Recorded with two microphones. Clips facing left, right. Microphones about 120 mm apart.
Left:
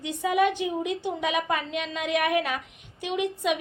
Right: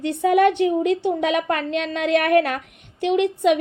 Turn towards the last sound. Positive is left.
turn(degrees=-60)  # may be behind; listen again after turning